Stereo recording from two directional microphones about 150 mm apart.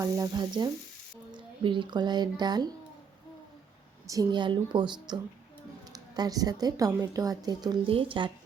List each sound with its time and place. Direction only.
0.0 s speech: 25° right (ahead or behind)
4.0 s speech: 25° right (ahead or behind)